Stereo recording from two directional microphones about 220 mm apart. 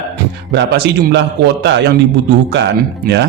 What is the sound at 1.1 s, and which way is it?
Speech, 50° right (ahead or behind).